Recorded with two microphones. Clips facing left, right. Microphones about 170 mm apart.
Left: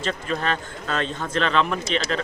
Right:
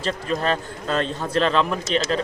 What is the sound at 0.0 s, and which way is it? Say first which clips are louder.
Speech: right 2 dB; 35° right (ahead or behind).